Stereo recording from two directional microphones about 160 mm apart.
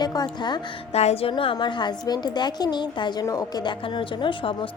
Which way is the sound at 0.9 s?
40° left (ahead or behind).